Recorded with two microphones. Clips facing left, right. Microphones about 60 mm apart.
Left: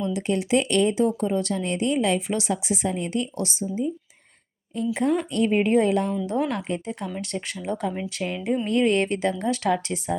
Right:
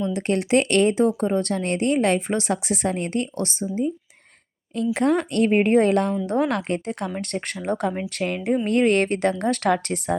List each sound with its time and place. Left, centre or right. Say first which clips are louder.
0.2 s a woman's voice: right 3 dB; right
4.9 s a woman's voice: right 3 dB; right
6.2 s speech: right 3 dB; right
6.5 s a woman's voice: right 3 dB; right